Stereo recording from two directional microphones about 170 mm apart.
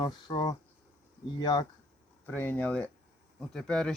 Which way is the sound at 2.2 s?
10° left (ahead or behind).